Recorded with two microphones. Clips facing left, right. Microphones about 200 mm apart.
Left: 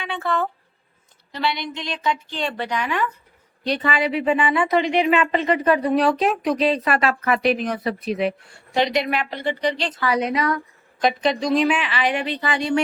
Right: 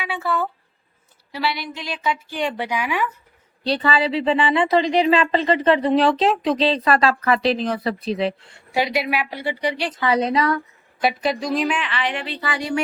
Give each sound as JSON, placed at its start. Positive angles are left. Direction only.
{"t": 0.0, "sound": "a woman's voice", "side_deg": -5}
{"t": 3.6, "sound": "a woman's voice", "side_deg": -30}
{"t": 8.7, "sound": "a woman's voice", "side_deg": -5}
{"t": 10.1, "sound": "a woman's voice", "side_deg": -30}
{"t": 11.0, "sound": "a woman's voice", "side_deg": -5}